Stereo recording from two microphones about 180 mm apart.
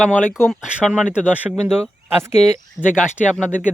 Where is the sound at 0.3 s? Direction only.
Centre (ahead or behind).